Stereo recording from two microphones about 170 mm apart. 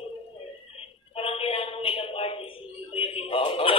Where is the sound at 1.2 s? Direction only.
35° left (ahead or behind).